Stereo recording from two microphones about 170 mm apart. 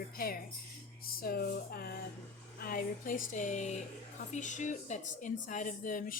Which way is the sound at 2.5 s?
60° left (ahead or behind).